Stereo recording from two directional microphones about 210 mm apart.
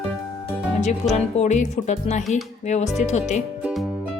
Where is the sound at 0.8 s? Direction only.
30° left (ahead or behind).